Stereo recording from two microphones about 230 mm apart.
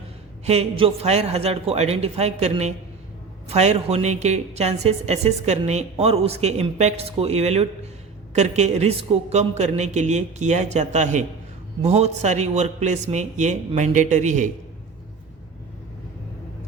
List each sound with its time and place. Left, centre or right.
0.4 s a woman's voice: right